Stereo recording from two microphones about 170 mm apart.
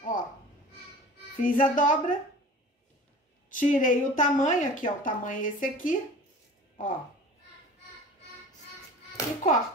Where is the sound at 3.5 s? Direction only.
50° left (ahead or behind).